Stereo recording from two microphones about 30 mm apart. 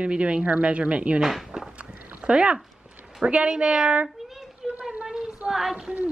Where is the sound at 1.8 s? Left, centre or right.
Right.